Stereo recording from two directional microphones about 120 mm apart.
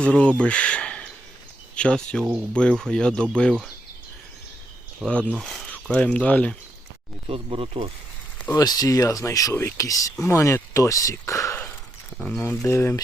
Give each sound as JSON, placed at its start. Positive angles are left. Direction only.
{"t": 0.0, "sound": "speech", "side_deg": 10}
{"t": 5.0, "sound": "speech", "side_deg": -5}
{"t": 7.3, "sound": "speech", "side_deg": -50}
{"t": 8.5, "sound": "speech", "side_deg": 30}
{"t": 11.5, "sound": "a sound", "side_deg": 15}
{"t": 12.1, "sound": "speech", "side_deg": 10}